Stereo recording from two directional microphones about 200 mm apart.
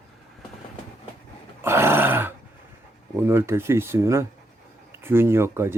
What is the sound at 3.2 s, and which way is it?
Speech, 10° right (ahead or behind).